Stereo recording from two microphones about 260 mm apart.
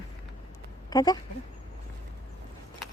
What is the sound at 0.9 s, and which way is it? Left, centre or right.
Speech, centre.